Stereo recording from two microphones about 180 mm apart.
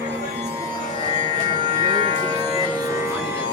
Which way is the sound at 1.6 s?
40° right (ahead or behind).